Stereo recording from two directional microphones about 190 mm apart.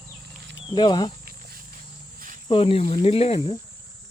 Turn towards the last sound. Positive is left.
turn(degrees=30)  # may be behind; listen again after turning